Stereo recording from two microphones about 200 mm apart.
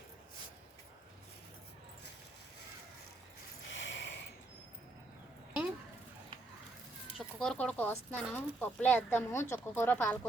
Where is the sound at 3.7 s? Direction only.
65° left (ahead or behind).